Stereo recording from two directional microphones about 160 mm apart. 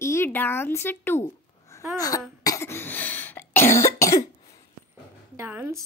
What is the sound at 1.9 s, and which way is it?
Cough, 20° left (ahead or behind).